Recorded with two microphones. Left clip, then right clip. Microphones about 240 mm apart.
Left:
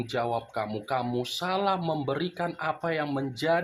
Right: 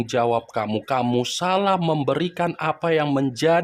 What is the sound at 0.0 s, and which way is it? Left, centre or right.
Speech, right.